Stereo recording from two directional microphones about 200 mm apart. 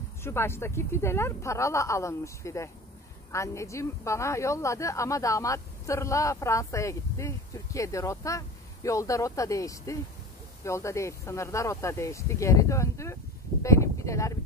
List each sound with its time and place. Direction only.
0.2 s a woman's voice: 10° left (ahead or behind)